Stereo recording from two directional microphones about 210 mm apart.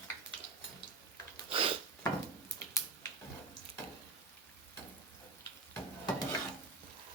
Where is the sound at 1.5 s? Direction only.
25° right (ahead or behind).